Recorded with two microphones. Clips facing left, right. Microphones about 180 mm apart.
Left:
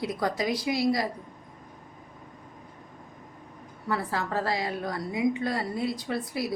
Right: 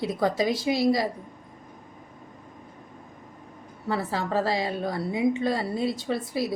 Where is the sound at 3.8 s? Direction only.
25° right (ahead or behind).